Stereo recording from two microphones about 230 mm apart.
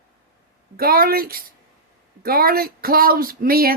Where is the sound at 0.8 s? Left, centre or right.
Right.